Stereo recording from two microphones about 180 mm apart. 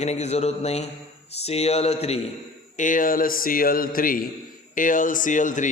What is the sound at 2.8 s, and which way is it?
Speech, 45° left (ahead or behind).